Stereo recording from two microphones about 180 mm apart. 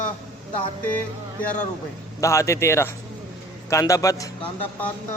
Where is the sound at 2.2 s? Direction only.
15° left (ahead or behind).